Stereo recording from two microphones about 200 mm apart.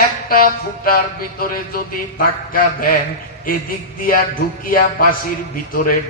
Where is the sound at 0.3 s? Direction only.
45° left (ahead or behind).